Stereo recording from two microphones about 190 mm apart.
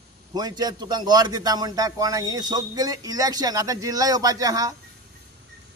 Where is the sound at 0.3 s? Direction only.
20° right (ahead or behind).